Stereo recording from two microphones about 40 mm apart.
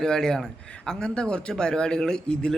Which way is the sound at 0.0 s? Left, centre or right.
Centre.